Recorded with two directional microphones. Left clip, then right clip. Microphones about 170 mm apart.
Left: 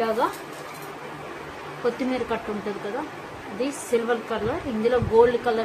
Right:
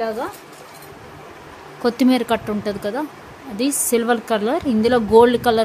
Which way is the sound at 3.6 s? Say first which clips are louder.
Right 5 dB; 90° right.